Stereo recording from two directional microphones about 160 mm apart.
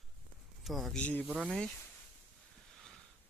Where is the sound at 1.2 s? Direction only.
5° right (ahead or behind).